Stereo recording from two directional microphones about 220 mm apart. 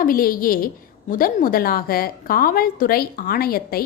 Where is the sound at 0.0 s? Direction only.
40° left (ahead or behind).